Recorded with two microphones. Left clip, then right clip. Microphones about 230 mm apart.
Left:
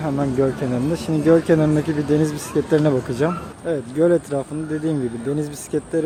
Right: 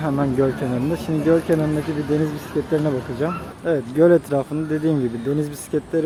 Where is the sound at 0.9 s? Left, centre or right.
Centre.